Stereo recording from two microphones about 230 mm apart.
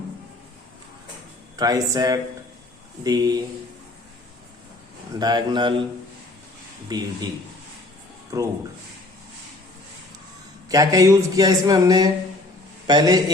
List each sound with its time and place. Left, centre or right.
1.5 s a man's voice: centre
5.2 s a man's voice: centre
6.8 s a man's voice: centre
8.3 s a man's voice: centre
10.7 s a man's voice: centre